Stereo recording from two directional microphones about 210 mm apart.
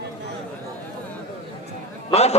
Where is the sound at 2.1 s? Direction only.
30° left (ahead or behind).